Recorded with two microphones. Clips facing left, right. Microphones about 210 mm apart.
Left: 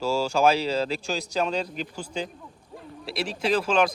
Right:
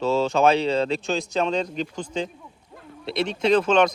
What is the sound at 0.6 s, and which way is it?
Speech, 30° right (ahead or behind).